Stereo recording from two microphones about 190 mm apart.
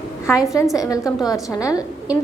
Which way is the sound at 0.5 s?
15° left (ahead or behind).